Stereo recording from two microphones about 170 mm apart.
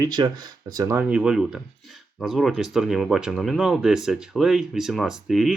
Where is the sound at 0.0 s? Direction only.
25° right (ahead or behind).